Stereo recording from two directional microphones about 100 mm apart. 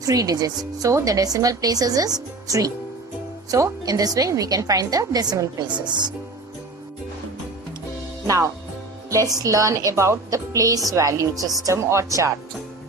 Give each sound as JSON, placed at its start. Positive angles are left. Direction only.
{"t": 0.0, "sound": "speech", "side_deg": -35}
{"t": 9.0, "sound": "speech", "side_deg": -35}